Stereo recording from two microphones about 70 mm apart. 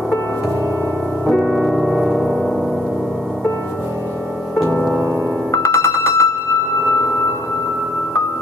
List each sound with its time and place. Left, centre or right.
1.2 s piano: centre
5.5 s music: left